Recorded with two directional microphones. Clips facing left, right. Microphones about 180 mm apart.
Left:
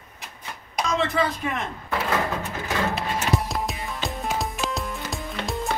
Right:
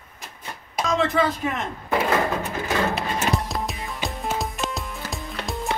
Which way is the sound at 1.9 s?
15° right (ahead or behind).